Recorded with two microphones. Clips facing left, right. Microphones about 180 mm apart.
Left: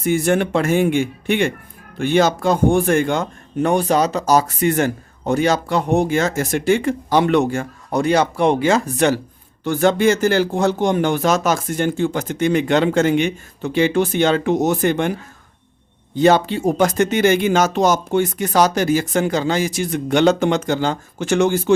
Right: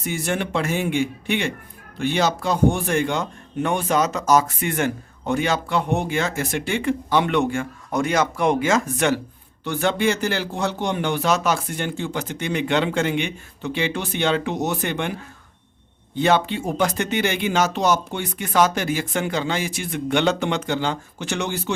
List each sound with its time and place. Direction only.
0.0 s speech: 50° left (ahead or behind)
16.1 s speech: 40° left (ahead or behind)